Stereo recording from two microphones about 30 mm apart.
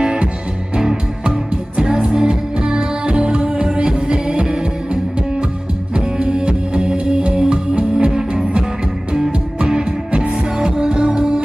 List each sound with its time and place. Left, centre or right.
0.0 s music: right
1.3 s music: right
5.9 s music: right
10.3 s music: right